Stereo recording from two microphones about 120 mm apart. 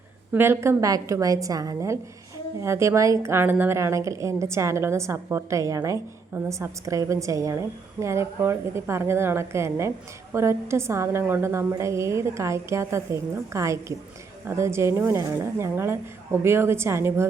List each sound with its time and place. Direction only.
0.3 s a woman's voice: 20° right (ahead or behind)